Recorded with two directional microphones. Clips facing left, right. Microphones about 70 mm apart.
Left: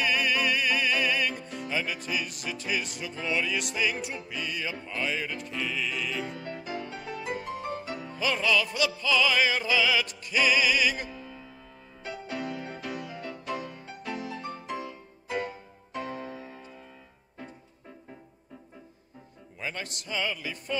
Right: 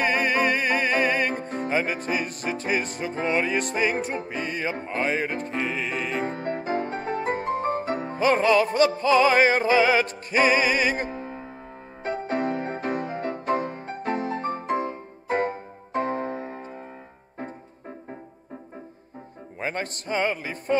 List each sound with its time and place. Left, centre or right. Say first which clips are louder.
0.0 s music: right 5 dB; right
19.6 s speech: right 7 dB; right